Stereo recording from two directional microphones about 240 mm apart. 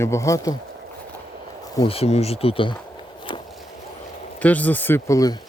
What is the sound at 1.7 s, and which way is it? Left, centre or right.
Speech, left.